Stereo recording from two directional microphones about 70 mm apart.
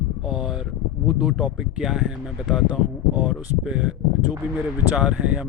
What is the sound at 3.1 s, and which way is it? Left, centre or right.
Speech, centre.